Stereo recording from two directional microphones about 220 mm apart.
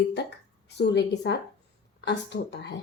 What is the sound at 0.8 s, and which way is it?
Speech, 50° left (ahead or behind).